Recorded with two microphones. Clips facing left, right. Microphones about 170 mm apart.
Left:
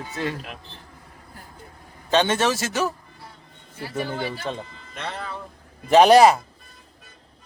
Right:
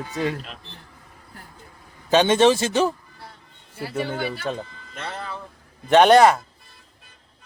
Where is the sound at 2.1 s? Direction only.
15° right (ahead or behind).